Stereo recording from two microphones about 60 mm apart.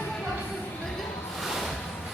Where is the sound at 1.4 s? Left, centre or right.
Centre.